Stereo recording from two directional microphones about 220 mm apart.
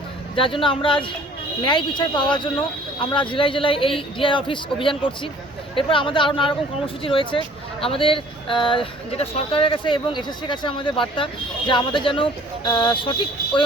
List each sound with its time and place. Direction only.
0.3 s speech: 25° left (ahead or behind)